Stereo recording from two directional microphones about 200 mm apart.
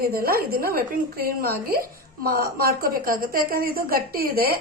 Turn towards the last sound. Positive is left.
turn(degrees=-50)  # may be behind; listen again after turning